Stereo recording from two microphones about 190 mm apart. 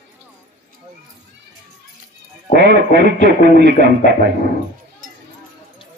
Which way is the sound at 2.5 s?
65° right (ahead or behind).